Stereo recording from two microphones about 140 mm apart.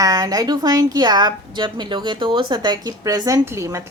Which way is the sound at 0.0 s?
25° right (ahead or behind).